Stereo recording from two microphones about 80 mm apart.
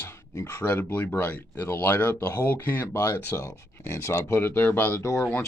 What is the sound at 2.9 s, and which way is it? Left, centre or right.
Speech, left.